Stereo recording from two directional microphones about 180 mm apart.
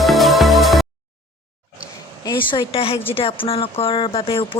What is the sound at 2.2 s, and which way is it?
A woman's voice, 25° left (ahead or behind).